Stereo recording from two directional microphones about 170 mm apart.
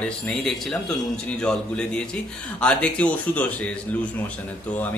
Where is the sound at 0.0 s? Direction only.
5° left (ahead or behind).